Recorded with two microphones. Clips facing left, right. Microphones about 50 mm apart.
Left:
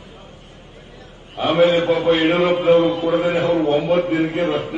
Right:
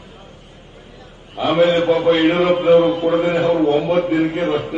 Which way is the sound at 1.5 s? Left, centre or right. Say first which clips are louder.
Right 1 dB; centre.